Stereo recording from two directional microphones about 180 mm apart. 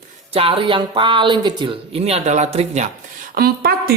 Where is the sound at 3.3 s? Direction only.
55° right (ahead or behind).